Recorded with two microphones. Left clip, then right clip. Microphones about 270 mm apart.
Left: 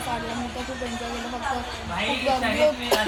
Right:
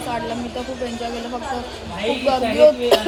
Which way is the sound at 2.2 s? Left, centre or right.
Right.